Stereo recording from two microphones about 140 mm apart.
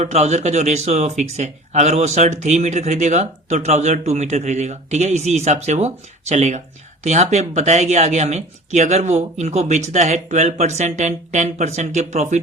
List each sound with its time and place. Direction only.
0.0 s speech: 55° right (ahead or behind)